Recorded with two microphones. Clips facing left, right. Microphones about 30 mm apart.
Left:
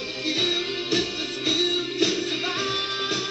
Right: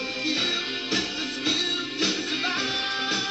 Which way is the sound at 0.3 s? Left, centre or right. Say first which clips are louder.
Left 3 dB; right.